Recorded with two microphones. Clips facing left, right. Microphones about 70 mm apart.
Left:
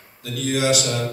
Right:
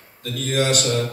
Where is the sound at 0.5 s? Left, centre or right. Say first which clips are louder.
Even; right.